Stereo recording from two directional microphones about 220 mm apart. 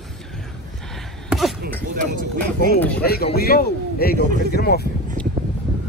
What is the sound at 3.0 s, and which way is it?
A man's voice, 45° left (ahead or behind).